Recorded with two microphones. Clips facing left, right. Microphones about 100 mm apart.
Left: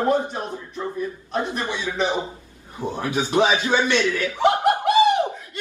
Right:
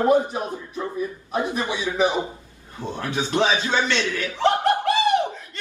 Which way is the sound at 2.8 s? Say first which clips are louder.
Left 2 dB; 15° left (ahead or behind).